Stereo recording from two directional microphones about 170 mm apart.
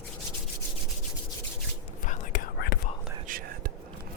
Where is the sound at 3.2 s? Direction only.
55° right (ahead or behind).